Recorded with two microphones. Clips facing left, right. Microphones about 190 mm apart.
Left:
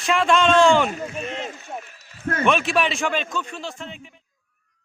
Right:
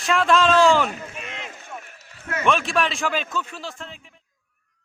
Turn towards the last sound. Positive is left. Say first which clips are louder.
# left 2 dB
turn(degrees=0)  # may be behind; listen again after turning